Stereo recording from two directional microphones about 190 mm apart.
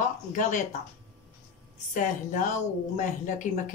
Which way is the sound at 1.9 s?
40° left (ahead or behind).